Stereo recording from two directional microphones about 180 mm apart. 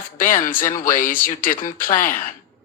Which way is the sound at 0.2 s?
50° left (ahead or behind).